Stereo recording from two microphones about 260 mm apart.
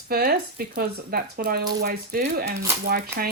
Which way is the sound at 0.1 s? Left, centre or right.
Right.